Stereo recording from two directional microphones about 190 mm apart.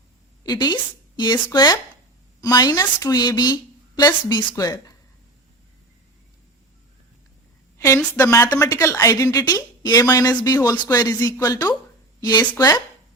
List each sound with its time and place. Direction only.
0.4 s a woman's voice: 20° left (ahead or behind)
7.8 s a woman's voice: 15° left (ahead or behind)